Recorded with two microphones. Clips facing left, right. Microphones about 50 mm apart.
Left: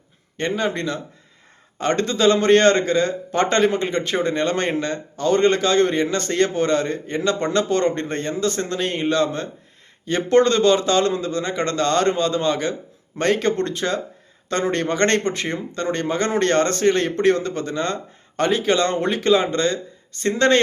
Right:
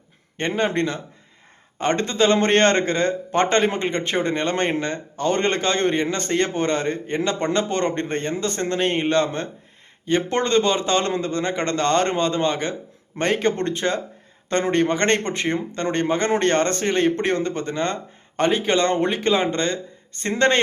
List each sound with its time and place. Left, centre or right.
0.3 s a man's voice: right
1.8 s a man's voice: right
10.1 s a man's voice: centre
17.2 s a man's voice: right